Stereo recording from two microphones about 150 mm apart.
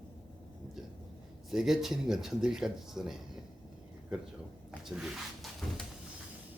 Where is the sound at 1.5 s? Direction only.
5° right (ahead or behind).